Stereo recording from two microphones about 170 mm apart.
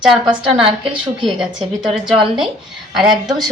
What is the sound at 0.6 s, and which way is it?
Speech, 30° right (ahead or behind).